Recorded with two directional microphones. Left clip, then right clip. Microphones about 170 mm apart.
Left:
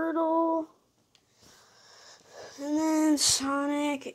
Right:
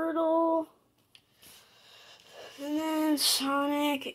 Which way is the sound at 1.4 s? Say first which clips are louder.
Left 1 dB; 35° left (ahead or behind).